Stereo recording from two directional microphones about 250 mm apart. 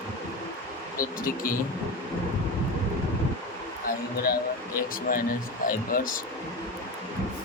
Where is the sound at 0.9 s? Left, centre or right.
Left.